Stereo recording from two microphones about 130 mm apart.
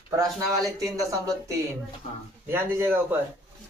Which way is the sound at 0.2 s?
25° right (ahead or behind).